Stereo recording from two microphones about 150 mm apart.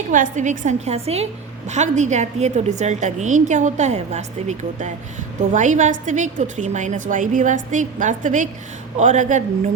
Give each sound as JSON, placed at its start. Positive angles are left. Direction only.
{"t": 0.1, "sound": "a woman's voice", "side_deg": -55}